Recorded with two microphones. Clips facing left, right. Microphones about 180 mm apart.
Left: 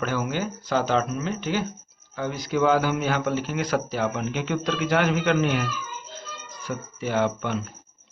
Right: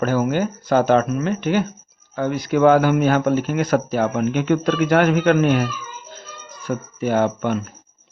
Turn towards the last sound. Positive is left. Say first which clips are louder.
# right 5 dB
turn(degrees=-50)  # may be behind; listen again after turning